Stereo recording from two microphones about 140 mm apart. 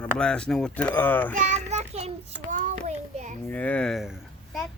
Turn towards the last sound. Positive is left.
turn(degrees=0)  # may be behind; listen again after turning